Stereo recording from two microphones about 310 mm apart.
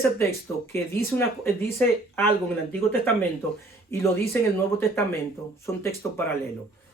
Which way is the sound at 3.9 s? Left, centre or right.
Centre.